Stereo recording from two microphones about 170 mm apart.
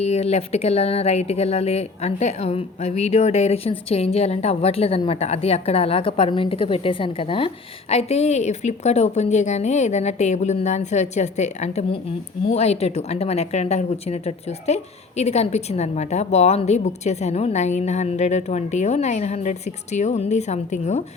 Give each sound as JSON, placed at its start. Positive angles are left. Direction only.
{"t": 0.0, "sound": "speech", "side_deg": 40}